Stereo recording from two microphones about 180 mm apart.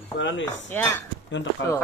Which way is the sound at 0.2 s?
90° left.